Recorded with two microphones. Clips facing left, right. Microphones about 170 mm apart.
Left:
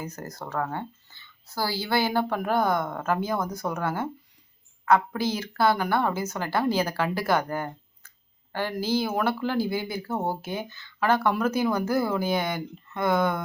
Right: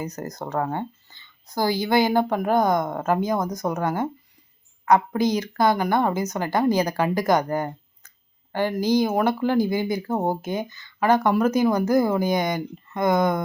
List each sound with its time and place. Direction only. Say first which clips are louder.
0.2 s speech: right 4 dB; 15° right (ahead or behind)